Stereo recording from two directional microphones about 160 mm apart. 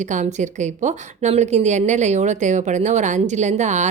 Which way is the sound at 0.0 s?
50° right (ahead or behind).